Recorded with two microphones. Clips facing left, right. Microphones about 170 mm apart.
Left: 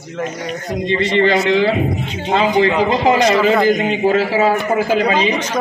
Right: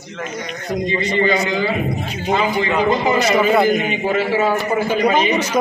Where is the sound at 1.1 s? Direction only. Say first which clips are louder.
Left 5 dB; 85° left.